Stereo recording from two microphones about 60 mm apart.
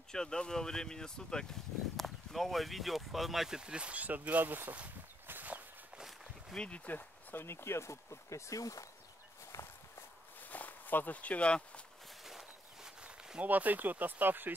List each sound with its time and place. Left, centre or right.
0.1 s speech: centre; by 5.6 s right
6.5 s speech: centre
6.9 s speech: left
7.4 s speech: left
10.4 s a sound: left
12.3 s walk: centre
13.0 s a sound: centre
13.4 s speech: right